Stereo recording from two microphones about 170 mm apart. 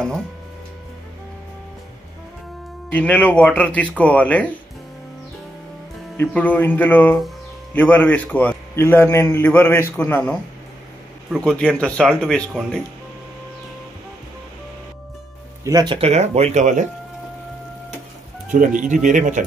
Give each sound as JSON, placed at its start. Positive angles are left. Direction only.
{"t": 2.9, "sound": "a man's voice", "side_deg": 10}
{"t": 6.2, "sound": "a man's voice", "side_deg": 10}
{"t": 11.4, "sound": "speech", "side_deg": 5}
{"t": 15.6, "sound": "speech", "side_deg": -20}
{"t": 16.0, "sound": "speech", "side_deg": -40}
{"t": 18.8, "sound": "speech", "side_deg": -45}